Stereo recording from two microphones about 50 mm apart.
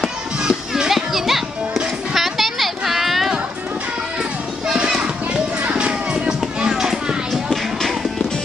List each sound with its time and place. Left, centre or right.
0.4 s music: centre
2.1 s a sound: centre
4.6 s music: centre